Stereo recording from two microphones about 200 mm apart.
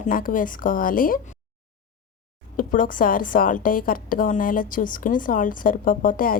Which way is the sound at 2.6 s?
45° left (ahead or behind).